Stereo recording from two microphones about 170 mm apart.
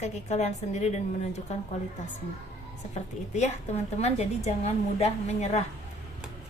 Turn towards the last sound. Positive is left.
turn(degrees=40)  # may be behind; listen again after turning